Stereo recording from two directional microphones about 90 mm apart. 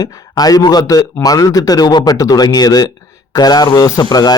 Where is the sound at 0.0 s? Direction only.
45° left (ahead or behind).